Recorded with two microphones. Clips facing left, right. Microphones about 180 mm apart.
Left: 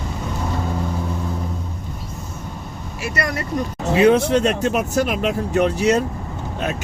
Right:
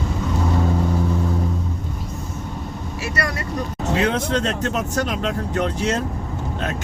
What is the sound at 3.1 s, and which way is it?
Speech, 20° left (ahead or behind).